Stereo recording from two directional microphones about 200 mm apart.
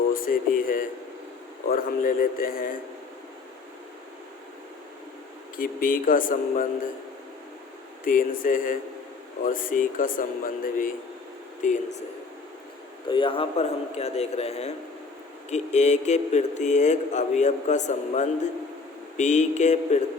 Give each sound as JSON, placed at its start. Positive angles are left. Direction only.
{"t": 0.1, "sound": "a man's voice", "side_deg": 45}
{"t": 5.5, "sound": "a man's voice", "side_deg": 45}
{"t": 8.0, "sound": "a man's voice", "side_deg": 40}
{"t": 13.1, "sound": "a man's voice", "side_deg": 25}